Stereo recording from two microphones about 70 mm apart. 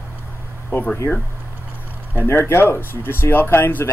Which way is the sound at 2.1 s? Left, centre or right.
Left.